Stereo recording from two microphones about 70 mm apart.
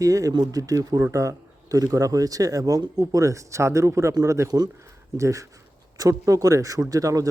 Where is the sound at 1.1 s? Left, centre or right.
Right.